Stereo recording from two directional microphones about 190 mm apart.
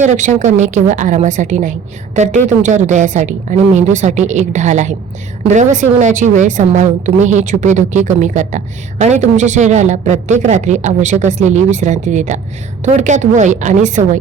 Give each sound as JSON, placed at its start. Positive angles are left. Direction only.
{"t": 0.0, "sound": "a woman's voice", "side_deg": -40}